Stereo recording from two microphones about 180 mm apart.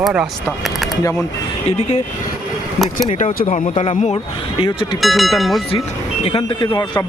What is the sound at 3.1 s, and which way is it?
Speech, 45° left (ahead or behind).